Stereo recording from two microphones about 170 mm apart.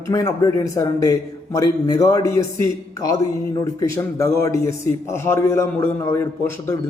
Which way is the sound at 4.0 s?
15° left (ahead or behind).